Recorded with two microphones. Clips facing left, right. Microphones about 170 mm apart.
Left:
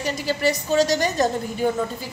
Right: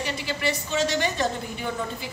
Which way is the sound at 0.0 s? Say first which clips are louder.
Left 5 dB; 40° left (ahead or behind).